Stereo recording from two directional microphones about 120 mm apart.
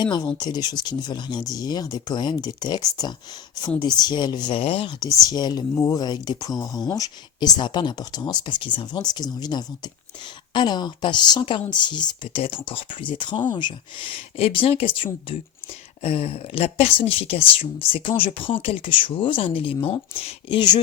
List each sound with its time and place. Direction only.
0.0 s speech: 40° left (ahead or behind)
5.3 s speech: 35° left (ahead or behind)
14.3 s speech: 50° left (ahead or behind)